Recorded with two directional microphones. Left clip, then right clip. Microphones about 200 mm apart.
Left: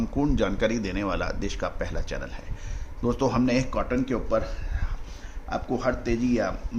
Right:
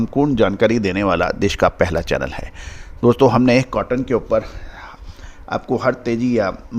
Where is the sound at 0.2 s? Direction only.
45° right (ahead or behind).